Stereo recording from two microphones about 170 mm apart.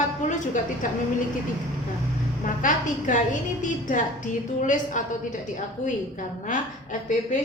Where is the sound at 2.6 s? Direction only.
50° left (ahead or behind).